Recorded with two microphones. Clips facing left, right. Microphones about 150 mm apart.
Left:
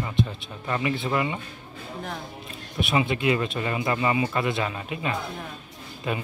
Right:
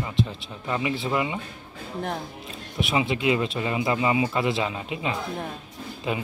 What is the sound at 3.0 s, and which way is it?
Speech, 20° right (ahead or behind).